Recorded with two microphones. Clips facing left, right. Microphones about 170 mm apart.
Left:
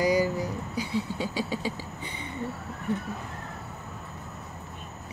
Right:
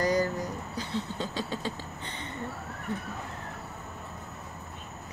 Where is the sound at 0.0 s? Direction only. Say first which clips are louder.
Left 3 dB; 10° left (ahead or behind).